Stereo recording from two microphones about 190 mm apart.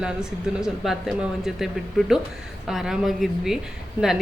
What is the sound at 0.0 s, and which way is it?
Speech, 5° right (ahead or behind).